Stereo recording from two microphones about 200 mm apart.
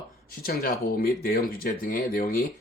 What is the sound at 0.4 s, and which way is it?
Speech, 45° left (ahead or behind).